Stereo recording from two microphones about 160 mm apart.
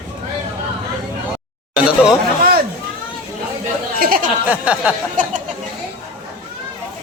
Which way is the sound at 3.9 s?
65° right (ahead or behind).